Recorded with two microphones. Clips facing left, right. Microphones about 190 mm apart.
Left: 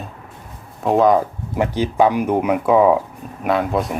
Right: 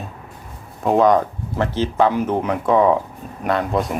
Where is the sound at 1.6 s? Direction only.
10° left (ahead or behind).